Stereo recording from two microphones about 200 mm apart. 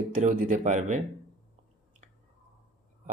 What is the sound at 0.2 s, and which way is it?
Speech, 35° right (ahead or behind).